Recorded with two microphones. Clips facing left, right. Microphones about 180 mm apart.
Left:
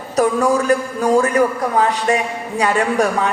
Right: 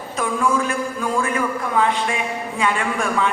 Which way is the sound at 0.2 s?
40° left (ahead or behind).